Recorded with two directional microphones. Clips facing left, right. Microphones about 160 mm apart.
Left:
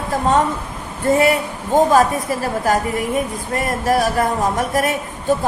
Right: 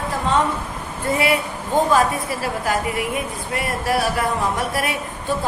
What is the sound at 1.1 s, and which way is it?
Speech, 45° left (ahead or behind).